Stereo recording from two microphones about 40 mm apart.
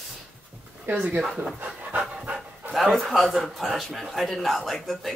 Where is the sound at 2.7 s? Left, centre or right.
Centre.